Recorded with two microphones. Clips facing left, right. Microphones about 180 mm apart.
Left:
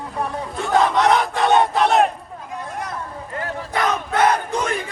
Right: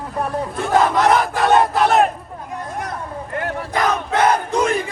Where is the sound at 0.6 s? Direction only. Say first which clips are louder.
Right 1 dB; centre (ahead or behind).